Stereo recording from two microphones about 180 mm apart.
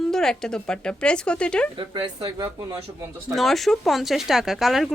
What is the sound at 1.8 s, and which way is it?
Speech, 25° right (ahead or behind).